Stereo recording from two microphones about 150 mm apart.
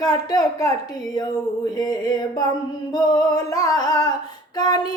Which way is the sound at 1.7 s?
25° left (ahead or behind).